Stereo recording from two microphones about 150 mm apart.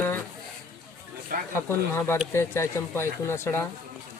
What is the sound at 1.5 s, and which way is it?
Speech, 15° left (ahead or behind).